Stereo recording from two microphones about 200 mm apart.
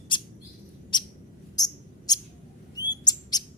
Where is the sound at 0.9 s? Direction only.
20° left (ahead or behind).